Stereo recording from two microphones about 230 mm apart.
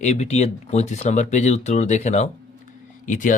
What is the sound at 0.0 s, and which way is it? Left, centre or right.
A man's voice, left.